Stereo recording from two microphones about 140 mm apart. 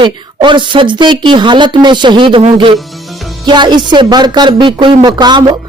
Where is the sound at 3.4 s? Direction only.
30° right (ahead or behind).